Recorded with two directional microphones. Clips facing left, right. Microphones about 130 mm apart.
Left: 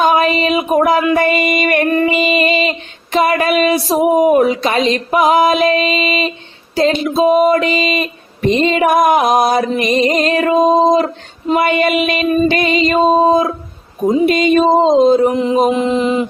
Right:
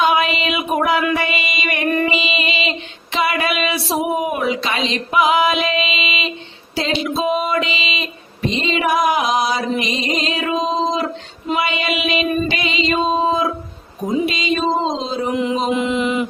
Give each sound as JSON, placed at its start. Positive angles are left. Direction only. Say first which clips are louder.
{"t": 0.0, "sound": "a sound", "louder": "left 4 dB", "side_deg": 45}
{"t": 1.1, "sound": "music", "louder": "left 8 dB", "side_deg": 50}
{"t": 14.1, "sound": "music", "louder": "left 8 dB", "side_deg": 55}
{"t": 15.3, "sound": "mantra", "louder": "left 5 dB", "side_deg": 35}